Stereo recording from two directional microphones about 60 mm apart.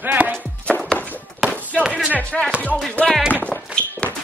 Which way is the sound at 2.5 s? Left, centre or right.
Right.